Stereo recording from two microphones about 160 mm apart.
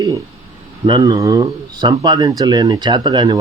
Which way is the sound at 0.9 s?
25° right (ahead or behind).